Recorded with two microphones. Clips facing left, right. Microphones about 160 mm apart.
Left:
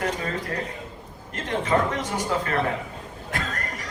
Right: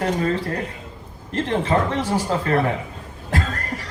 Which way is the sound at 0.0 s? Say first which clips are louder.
Right 6 dB; 35° right (ahead or behind).